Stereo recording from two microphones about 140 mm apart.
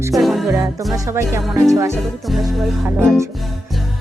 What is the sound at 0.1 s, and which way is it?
Music, centre (ahead or behind).